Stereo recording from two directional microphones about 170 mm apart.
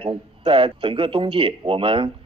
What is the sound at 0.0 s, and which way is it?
A man's voice, 35° right (ahead or behind).